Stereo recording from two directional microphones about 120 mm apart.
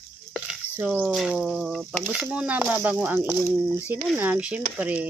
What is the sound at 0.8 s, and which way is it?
Speech, 15° right (ahead or behind).